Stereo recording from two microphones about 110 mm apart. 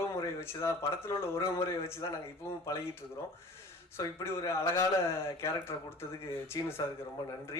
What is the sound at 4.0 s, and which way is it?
A man's voice, 25° left (ahead or behind).